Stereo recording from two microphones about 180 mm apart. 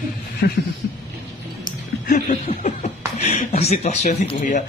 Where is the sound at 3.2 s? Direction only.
40° left (ahead or behind).